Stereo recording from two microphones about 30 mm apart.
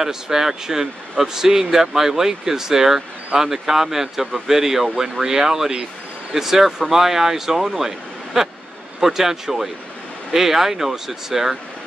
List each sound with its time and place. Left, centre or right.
0.0 s speech: centre